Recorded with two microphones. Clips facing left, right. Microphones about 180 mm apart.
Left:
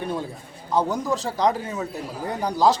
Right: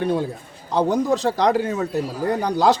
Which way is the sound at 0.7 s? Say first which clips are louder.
Right 4 dB; 65° right (ahead or behind).